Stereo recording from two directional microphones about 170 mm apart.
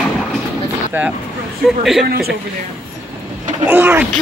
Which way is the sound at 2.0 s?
65° right (ahead or behind).